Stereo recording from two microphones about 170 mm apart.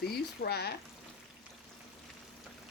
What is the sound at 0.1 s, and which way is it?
Frying, 70° left (ahead or behind).